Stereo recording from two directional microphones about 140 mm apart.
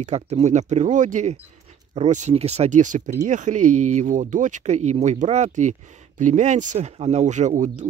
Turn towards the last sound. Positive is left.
turn(degrees=-60)  # may be behind; listen again after turning